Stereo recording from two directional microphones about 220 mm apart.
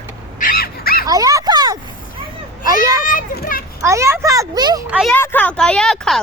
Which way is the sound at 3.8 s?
15° right (ahead or behind).